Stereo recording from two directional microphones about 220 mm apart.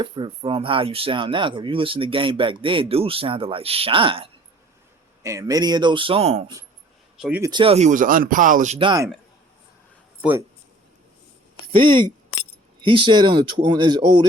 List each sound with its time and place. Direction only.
0.0 s speech: 25° right (ahead or behind)
7.2 s speech: 5° right (ahead or behind)
7.5 s speech: 25° right (ahead or behind)
10.2 s speech: 10° right (ahead or behind)
11.7 s speech: 20° right (ahead or behind)